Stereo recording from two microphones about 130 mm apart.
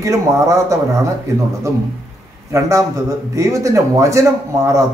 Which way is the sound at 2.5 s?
25° right (ahead or behind).